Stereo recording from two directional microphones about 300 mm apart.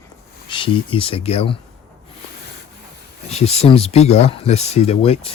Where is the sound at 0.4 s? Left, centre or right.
Centre.